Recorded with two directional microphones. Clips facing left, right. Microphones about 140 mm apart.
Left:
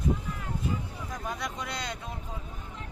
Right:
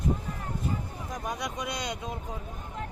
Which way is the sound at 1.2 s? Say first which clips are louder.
Right 2 dB; 15° right (ahead or behind).